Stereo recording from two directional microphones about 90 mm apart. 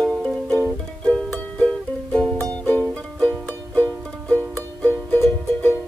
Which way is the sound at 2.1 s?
10° left (ahead or behind).